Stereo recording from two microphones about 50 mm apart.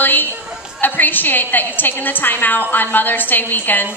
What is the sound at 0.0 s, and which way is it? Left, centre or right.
Chatter, left.